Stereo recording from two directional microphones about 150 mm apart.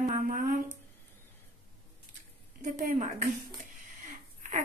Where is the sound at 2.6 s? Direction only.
55° right (ahead or behind).